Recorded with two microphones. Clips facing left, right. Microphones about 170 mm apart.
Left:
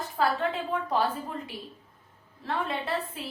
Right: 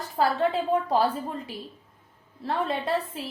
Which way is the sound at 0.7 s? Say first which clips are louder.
Right 3 dB; 35° right (ahead or behind).